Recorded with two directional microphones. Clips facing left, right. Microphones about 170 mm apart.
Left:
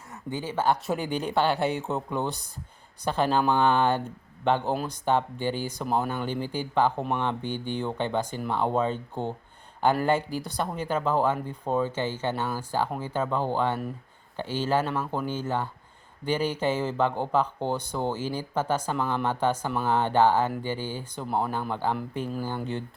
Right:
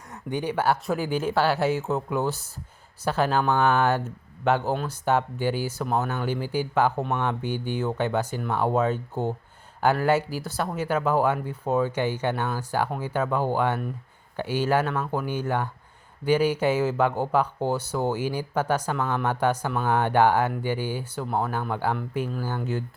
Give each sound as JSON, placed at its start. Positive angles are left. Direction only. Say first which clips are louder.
{"t": 0.1, "sound": "speech", "louder": "right 4 dB", "side_deg": -20}
{"t": 14.8, "sound": "speech", "louder": "right 1 dB", "side_deg": 10}
{"t": 15.1, "sound": "speech", "louder": "right 2 dB", "side_deg": -10}
{"t": 21.2, "sound": "speech", "louder": "even", "side_deg": 0}
{"t": 22.3, "sound": "speech", "louder": "right 1 dB", "side_deg": 15}